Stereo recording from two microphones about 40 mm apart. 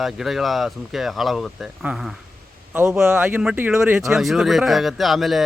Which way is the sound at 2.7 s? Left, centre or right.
Right.